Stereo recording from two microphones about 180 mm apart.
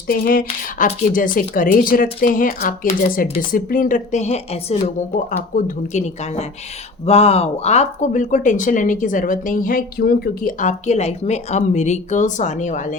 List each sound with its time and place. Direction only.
0.1 s speech: 50° left (ahead or behind)